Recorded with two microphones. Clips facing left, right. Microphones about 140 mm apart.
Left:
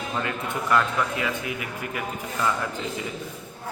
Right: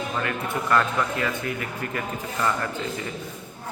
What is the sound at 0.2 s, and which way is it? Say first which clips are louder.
A man's voice: even; 20° left (ahead or behind).